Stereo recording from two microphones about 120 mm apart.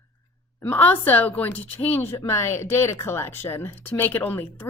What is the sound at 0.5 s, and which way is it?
A woman's voice, 15° left (ahead or behind).